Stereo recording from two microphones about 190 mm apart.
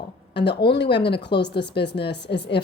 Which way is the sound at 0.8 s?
60° left (ahead or behind).